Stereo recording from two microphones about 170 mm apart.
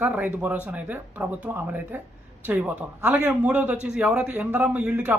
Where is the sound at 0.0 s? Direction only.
10° right (ahead or behind).